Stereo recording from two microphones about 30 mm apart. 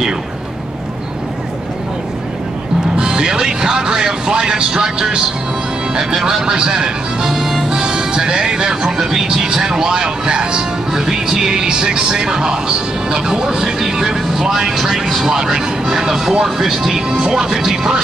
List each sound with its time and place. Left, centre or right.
3.0 s music: right
5.9 s speech: centre
6.4 s music: right; by 7.8 s centre
7.8 s speech: right; by 17.0 s centre
17.1 s speech: right